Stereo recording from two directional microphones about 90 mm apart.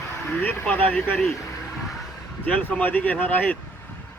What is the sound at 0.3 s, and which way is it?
Speech, 20° left (ahead or behind).